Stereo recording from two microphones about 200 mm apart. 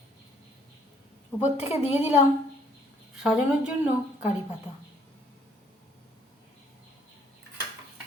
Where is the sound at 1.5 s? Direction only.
30° left (ahead or behind).